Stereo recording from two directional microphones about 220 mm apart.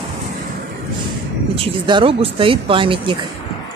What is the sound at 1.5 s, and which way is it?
Speech, 25° right (ahead or behind).